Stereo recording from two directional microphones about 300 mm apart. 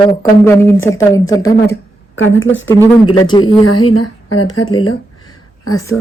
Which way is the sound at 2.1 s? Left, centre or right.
Left.